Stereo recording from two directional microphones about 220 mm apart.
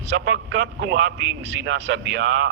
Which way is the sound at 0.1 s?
55° right (ahead or behind).